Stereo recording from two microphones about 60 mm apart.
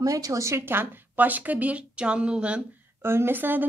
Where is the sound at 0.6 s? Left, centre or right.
Right; by 2.6 s centre.